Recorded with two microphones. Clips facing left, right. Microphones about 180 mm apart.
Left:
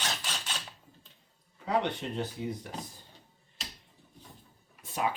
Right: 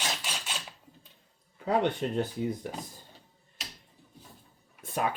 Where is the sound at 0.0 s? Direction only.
10° right (ahead or behind).